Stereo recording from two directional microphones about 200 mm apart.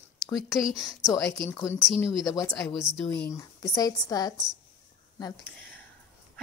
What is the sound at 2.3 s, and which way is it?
Speech, 15° left (ahead or behind).